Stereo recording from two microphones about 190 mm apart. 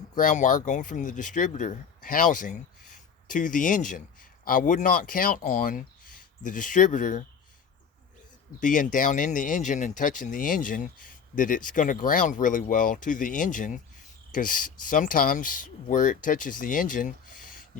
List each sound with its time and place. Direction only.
0.2 s speech: 40° left (ahead or behind)
8.6 s speech: 45° left (ahead or behind)